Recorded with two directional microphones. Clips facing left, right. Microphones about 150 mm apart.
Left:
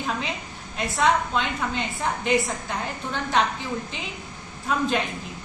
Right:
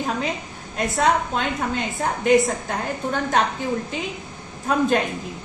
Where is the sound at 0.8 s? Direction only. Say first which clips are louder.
Right 2 dB; 45° right (ahead or behind).